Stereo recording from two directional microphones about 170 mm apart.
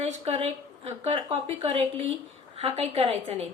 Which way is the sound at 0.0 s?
40° right (ahead or behind).